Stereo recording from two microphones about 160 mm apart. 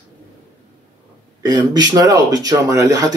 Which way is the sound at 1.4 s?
25° right (ahead or behind).